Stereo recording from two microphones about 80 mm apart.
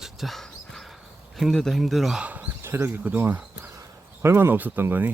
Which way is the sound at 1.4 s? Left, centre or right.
Centre.